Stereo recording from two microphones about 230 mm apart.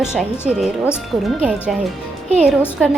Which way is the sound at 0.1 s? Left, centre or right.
Centre.